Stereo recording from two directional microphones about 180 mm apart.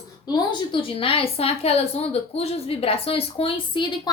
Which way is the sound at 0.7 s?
30° left (ahead or behind).